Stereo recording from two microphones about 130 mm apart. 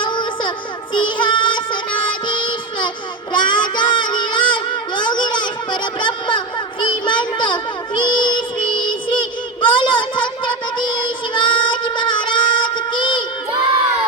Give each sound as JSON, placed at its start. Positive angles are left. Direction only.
{"t": 0.0, "sound": "child singing", "side_deg": 35}